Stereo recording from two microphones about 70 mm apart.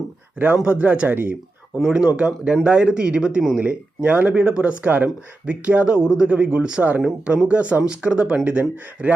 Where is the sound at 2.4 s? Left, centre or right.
Centre.